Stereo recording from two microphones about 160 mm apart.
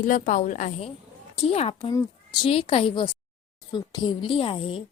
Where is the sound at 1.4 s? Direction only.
40° left (ahead or behind).